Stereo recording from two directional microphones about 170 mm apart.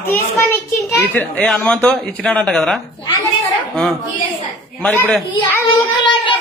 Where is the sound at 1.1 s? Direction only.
10° left (ahead or behind).